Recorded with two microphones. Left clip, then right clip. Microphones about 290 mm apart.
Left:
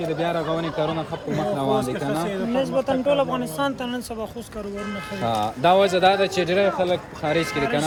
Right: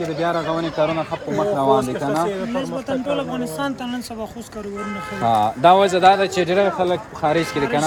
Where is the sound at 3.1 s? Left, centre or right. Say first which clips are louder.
Left 1 dB; centre.